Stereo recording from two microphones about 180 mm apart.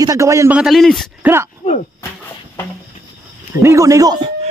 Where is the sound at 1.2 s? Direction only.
15° right (ahead or behind).